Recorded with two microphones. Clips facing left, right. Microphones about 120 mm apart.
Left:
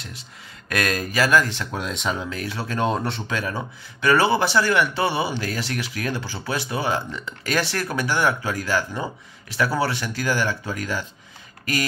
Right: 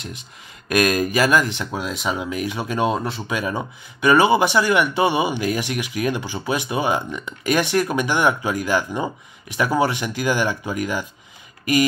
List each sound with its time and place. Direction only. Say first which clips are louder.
0.7 s speech: right 6 dB; 15° right (ahead or behind)
1.7 s speech: right 2 dB; 5° right (ahead or behind)
3.0 s speech: right 1 dB; 5° right (ahead or behind)
3.3 s speech: right 3 dB; 15° right (ahead or behind)